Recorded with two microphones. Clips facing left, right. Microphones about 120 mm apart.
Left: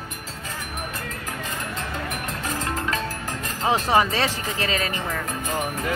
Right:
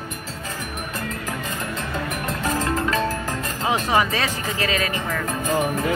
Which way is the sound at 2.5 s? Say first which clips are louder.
Right 5 dB; 40° right (ahead or behind).